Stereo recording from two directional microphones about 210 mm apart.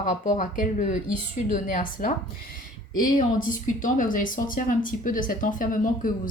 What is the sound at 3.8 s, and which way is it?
A woman's voice, 40° left (ahead or behind).